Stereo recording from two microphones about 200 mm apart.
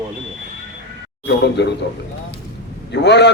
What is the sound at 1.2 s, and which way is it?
Speech, 60° left (ahead or behind).